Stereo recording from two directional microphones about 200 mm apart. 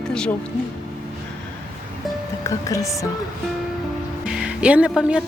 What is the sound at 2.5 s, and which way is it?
Speech, 15° left (ahead or behind).